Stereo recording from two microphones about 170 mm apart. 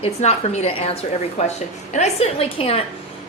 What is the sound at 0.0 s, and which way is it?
A woman's voice, 40° left (ahead or behind).